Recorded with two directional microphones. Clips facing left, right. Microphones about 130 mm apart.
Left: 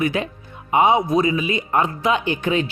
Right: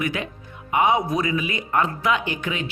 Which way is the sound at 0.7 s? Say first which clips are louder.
Left 4 dB; 25° left (ahead or behind).